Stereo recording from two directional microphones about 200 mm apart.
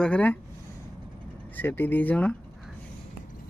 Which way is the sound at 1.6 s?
10° left (ahead or behind).